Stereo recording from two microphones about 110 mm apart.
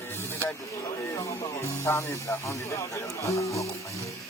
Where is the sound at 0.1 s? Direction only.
20° left (ahead or behind).